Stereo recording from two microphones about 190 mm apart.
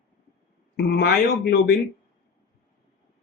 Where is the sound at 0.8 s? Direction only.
55° left (ahead or behind).